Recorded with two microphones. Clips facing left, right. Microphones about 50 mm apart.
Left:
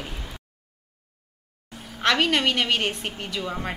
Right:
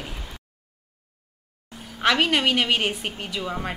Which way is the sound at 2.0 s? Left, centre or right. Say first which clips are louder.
Right 1 dB; centre.